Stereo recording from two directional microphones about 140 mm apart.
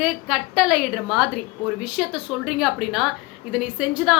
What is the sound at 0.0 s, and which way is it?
A woman's voice, 5° right (ahead or behind).